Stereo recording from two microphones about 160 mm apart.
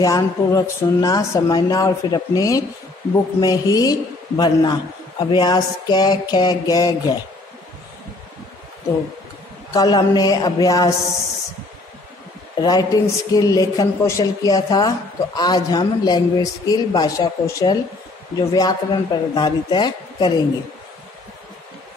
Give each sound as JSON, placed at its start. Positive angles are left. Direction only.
{"t": 0.0, "sound": "a woman's voice", "side_deg": 25}
{"t": 9.7, "sound": "a woman's voice", "side_deg": 25}
{"t": 12.5, "sound": "a woman's voice", "side_deg": 25}